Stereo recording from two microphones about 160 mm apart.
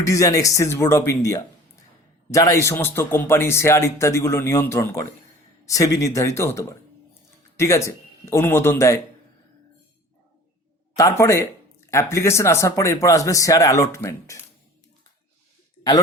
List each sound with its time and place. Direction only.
0.0 s a man's voice: 20° left (ahead or behind)
10.9 s speech: 20° left (ahead or behind)